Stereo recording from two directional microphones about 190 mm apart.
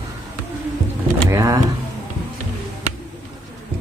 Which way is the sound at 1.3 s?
15° right (ahead or behind).